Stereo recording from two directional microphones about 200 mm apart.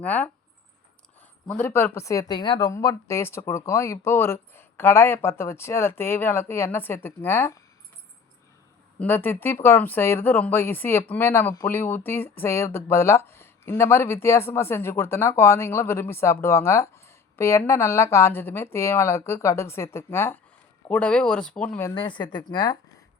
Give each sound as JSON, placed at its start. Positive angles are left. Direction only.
{"t": 0.0, "sound": "speech", "side_deg": 10}
{"t": 1.5, "sound": "speech", "side_deg": 10}
{"t": 9.0, "sound": "speech", "side_deg": 10}
{"t": 21.8, "sound": "a woman's voice", "side_deg": 25}